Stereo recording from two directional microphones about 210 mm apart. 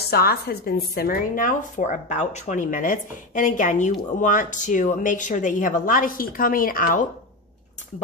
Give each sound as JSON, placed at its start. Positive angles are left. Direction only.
{"t": 0.1, "sound": "speech", "side_deg": 45}